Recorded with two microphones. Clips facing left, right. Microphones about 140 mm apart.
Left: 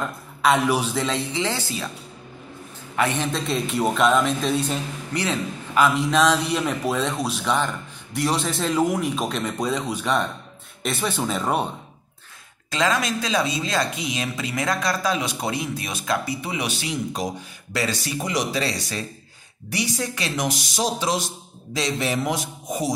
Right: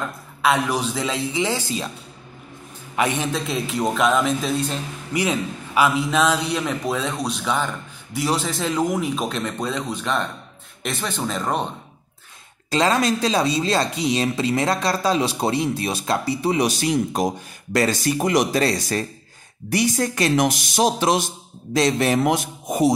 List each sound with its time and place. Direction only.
0.4 s a man's voice: 5° left (ahead or behind)
1.3 s speech: 15° right (ahead or behind)
3.0 s speech: 15° right (ahead or behind)
3.3 s a man's voice: 5° right (ahead or behind)
5.1 s a man's voice: 10° right (ahead or behind); by 11.7 s 5° left (ahead or behind)
12.7 s speech: 35° right (ahead or behind); by 22.9 s 55° right (ahead or behind)